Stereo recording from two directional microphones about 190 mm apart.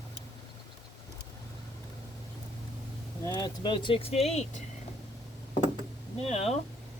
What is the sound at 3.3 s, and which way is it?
Speech, 20° left (ahead or behind).